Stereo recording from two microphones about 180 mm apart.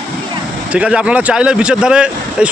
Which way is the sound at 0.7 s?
5° right (ahead or behind).